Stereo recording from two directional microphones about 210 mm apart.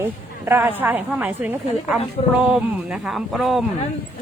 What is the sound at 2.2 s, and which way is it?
Speech, 25° left (ahead or behind).